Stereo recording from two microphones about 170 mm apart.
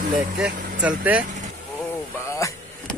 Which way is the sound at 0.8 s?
10° right (ahead or behind).